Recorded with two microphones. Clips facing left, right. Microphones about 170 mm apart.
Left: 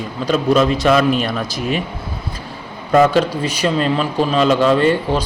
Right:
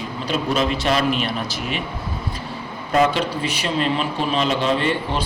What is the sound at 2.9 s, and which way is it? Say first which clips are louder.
Speech: left 6 dB; 45° left (ahead or behind).